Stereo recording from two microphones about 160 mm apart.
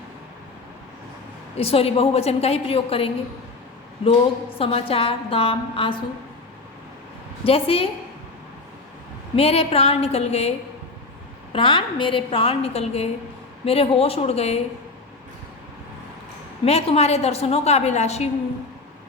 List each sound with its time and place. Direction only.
1.5 s a woman's voice: 40° left (ahead or behind)
4.5 s a woman's voice: 35° left (ahead or behind)
7.4 s a woman's voice: 35° left (ahead or behind)
9.3 s a woman's voice: 40° left (ahead or behind)
11.5 s a woman's voice: 35° left (ahead or behind)
16.6 s a woman's voice: 40° left (ahead or behind)